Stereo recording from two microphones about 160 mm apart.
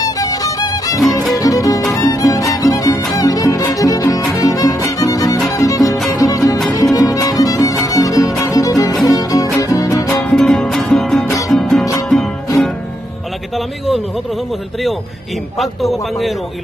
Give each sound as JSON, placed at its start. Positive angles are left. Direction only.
{"t": 0.0, "sound": "music", "side_deg": 20}
{"t": 10.2, "sound": "music", "side_deg": 5}
{"t": 11.8, "sound": "music", "side_deg": 20}
{"t": 13.6, "sound": "a man's voice", "side_deg": 0}